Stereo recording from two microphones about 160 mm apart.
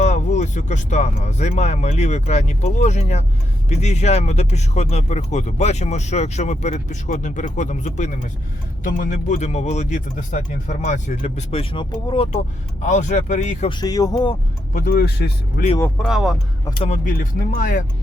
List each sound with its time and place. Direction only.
0.0 s speech: 45° left (ahead or behind)
12.8 s speech: 50° left (ahead or behind)
13.7 s speech: 25° left (ahead or behind)
14.7 s speech: 60° left (ahead or behind)
16.0 s speech: 5° right (ahead or behind)
16.6 s speech: 30° left (ahead or behind)
16.9 s speech: 60° left (ahead or behind)